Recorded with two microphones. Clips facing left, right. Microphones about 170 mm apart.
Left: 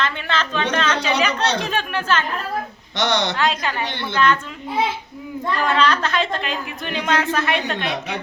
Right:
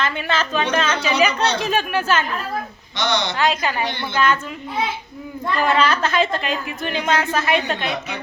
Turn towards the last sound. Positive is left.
turn(degrees=0)  # may be behind; listen again after turning